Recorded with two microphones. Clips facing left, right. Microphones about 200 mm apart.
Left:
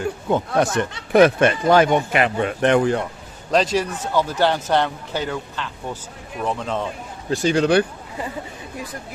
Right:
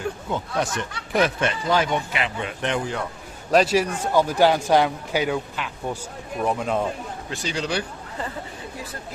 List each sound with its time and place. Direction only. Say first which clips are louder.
0.3 s speech: left 9 dB; 55° left (ahead or behind)
3.5 s speech: right 1 dB; 10° right (ahead or behind)
7.3 s speech: left 11 dB; 50° left (ahead or behind)